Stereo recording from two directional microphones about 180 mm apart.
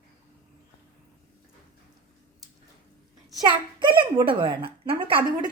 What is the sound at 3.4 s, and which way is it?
Speech, 25° right (ahead or behind).